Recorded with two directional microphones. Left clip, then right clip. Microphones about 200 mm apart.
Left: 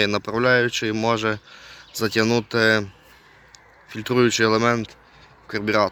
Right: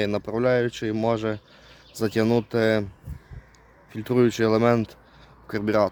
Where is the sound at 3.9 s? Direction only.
10° right (ahead or behind).